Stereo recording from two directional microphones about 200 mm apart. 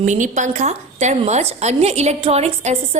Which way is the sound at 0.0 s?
35° right (ahead or behind).